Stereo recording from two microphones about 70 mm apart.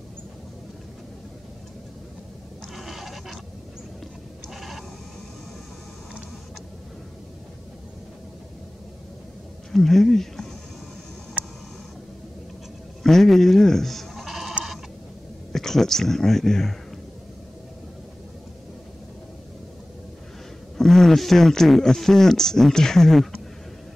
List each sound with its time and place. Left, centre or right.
2.7 s a sound: centre
4.6 s bleat: centre
9.7 s speech: centre
11.4 s a sound: centre
13.0 s speech: centre
15.5 s speech: centre
20.7 s speech: centre